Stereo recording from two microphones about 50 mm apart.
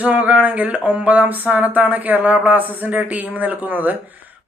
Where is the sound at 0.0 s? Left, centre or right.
Right.